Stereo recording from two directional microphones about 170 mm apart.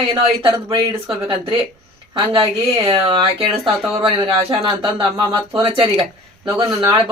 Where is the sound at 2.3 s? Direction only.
30° right (ahead or behind).